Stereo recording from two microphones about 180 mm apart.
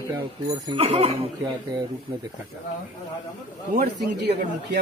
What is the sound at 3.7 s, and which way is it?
Speech, 60° right (ahead or behind).